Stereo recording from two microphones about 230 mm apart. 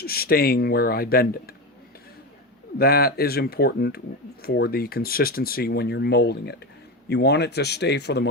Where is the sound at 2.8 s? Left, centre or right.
Left.